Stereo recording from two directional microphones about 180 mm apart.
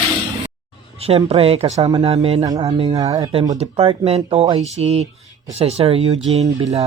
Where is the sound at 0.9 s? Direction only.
35° right (ahead or behind).